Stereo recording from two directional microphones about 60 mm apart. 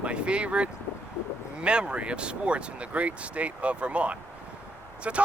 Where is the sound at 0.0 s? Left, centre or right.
Centre.